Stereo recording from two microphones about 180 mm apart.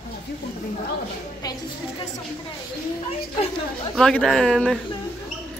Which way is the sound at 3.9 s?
5° left (ahead or behind).